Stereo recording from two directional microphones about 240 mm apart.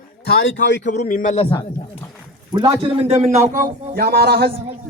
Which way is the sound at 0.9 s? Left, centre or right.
Left.